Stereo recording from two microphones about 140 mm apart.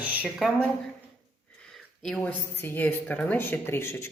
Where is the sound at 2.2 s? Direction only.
15° left (ahead or behind).